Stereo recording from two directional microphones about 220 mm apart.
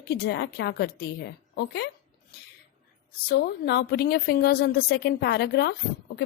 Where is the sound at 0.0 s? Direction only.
50° left (ahead or behind).